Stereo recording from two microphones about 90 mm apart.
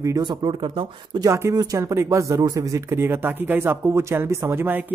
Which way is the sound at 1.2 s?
35° right (ahead or behind).